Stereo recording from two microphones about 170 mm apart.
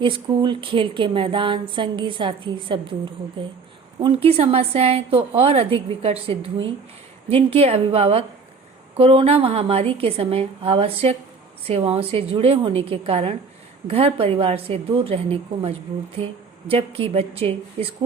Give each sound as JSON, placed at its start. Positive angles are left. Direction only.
{"t": 0.0, "sound": "speech", "side_deg": -30}
{"t": 4.0, "sound": "a woman's voice", "side_deg": -35}